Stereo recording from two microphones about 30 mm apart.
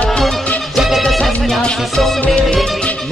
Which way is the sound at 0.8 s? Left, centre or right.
Centre.